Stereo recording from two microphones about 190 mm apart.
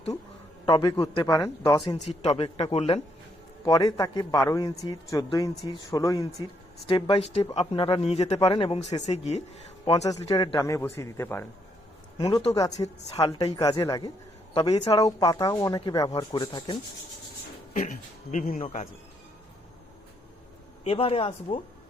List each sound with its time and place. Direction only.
0.6 s speech: 25° left (ahead or behind)
2.0 s a man's voice: 35° left (ahead or behind)
3.7 s a man's voice: 20° left (ahead or behind)
10.1 s speech: 20° left (ahead or behind)
12.1 s speech: 25° left (ahead or behind)
14.5 s speech: 30° left (ahead or behind)
15.0 s speech: 20° left (ahead or behind)
17.7 s a man's voice: 40° left (ahead or behind)
20.8 s a man's voice: 30° left (ahead or behind)